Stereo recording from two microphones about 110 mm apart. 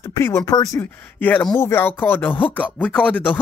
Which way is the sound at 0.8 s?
15° left (ahead or behind).